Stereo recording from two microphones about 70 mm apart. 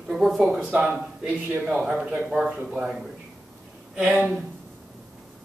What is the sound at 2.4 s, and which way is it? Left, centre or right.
Speech, centre.